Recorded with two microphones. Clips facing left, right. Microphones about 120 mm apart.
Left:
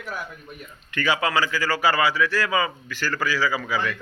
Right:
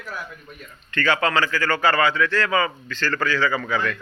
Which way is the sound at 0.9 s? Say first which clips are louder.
Right 2 dB; 10° left (ahead or behind).